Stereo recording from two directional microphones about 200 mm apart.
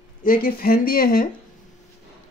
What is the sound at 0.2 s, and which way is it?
Speech, 45° left (ahead or behind).